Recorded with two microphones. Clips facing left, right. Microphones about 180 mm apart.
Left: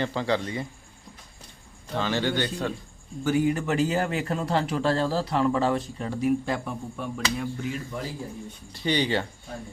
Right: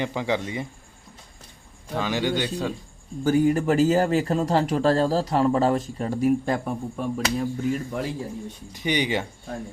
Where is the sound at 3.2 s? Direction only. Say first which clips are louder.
Right 4 dB; 40° right (ahead or behind).